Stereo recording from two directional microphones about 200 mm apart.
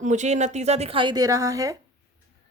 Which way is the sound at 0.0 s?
35° right (ahead or behind).